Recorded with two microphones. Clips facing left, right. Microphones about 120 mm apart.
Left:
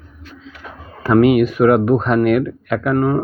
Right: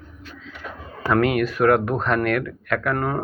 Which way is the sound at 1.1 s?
15° left (ahead or behind).